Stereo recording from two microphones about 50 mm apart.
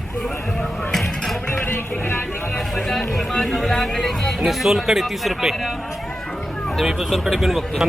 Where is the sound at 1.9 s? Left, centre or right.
Left.